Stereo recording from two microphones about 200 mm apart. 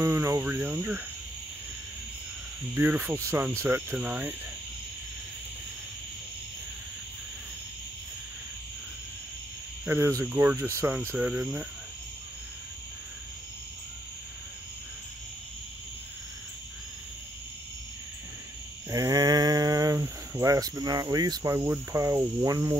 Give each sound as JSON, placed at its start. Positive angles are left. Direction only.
{"t": 0.0, "sound": "speech", "side_deg": -15}
{"t": 2.7, "sound": "speech", "side_deg": -10}
{"t": 9.8, "sound": "speech", "side_deg": -15}
{"t": 18.9, "sound": "speech", "side_deg": -15}